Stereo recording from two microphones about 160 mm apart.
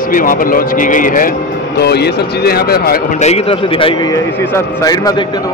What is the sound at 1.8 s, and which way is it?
Speech, 90° left.